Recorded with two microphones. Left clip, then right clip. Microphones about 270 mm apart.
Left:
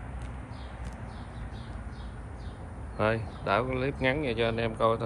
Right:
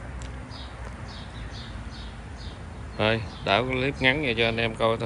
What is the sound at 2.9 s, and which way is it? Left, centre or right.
Speech, centre.